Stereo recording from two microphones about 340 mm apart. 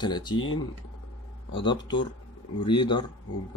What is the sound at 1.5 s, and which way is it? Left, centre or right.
Speech, centre.